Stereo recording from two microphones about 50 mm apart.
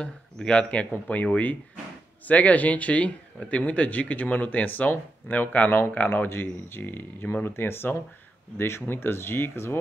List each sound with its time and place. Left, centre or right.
0.0 s speech: left